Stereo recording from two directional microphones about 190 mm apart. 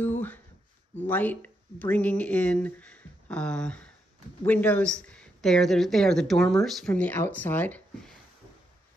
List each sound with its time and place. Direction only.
1.0 s speech: 10° left (ahead or behind)